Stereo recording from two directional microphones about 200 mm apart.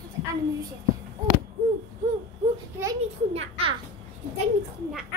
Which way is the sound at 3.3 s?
30° right (ahead or behind).